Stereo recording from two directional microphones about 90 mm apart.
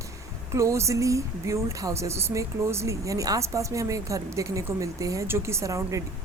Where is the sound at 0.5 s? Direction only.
35° right (ahead or behind).